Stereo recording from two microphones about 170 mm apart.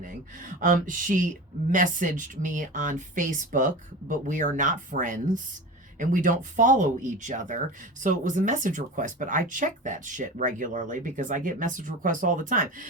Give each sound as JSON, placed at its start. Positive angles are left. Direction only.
{"t": 0.6, "sound": "speech", "side_deg": -50}